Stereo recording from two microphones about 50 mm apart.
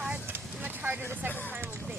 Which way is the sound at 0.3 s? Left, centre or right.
Right.